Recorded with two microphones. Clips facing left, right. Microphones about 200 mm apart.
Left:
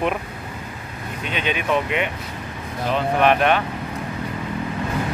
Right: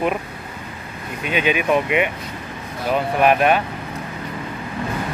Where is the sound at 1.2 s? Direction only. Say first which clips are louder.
Right 5 dB; 10° right (ahead or behind).